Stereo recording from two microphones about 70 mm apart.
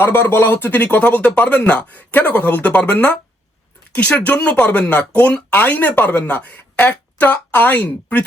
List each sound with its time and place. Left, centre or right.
0.0 s speech: left